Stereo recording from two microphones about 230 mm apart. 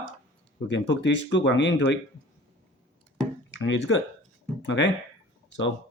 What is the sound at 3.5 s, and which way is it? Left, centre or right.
Speech, left.